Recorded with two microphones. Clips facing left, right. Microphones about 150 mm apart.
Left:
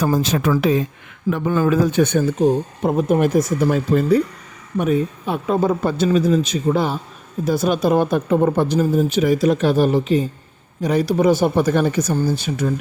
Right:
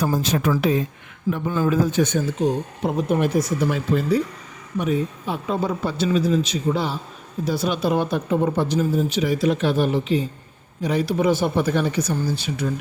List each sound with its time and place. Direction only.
0.0 s speech: 90° left
1.3 s speech: 75° left (ahead or behind); by 12.7 s 45° left (ahead or behind)